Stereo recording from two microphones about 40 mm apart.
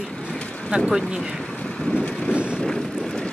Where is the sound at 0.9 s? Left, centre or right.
Centre.